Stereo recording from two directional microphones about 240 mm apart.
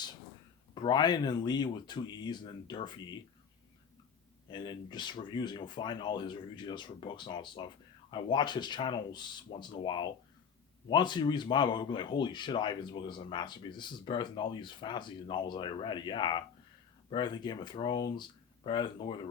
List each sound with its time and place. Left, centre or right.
0.7 s speech: centre
4.4 s speech: centre